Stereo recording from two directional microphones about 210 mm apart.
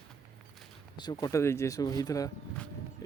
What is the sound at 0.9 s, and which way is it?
Speech, 20° left (ahead or behind).